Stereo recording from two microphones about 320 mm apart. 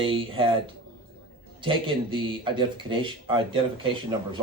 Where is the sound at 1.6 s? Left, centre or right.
Centre.